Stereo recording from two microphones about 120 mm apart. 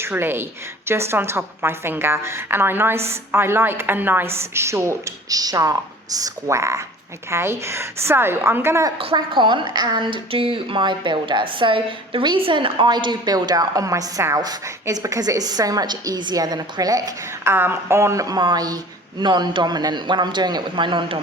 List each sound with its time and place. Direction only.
0.0 s a woman's voice: 20° right (ahead or behind)
9.1 s a woman's voice: 40° right (ahead or behind)